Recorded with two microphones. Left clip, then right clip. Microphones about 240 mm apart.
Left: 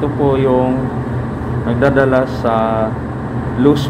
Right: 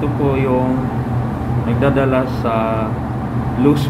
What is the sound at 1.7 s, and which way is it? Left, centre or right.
Speech, centre.